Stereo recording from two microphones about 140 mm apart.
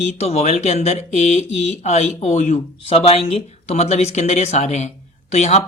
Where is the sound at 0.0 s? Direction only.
50° left (ahead or behind).